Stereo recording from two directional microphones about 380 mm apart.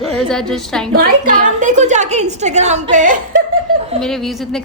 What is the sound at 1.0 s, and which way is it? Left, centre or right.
A woman's voice, right.